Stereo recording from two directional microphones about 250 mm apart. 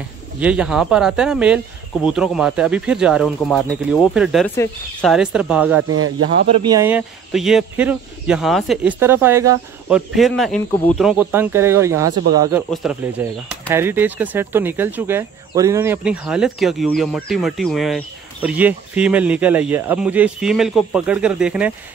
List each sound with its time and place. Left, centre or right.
0.4 s speech: centre
5.9 s speech: right
6.5 s speech: centre